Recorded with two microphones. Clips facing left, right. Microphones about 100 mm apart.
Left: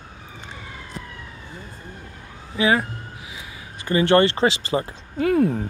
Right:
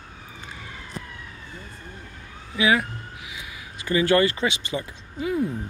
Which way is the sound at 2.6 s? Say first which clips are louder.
Left 2 dB; 35° left (ahead or behind).